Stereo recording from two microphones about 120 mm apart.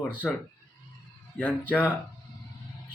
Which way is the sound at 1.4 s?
10° left (ahead or behind).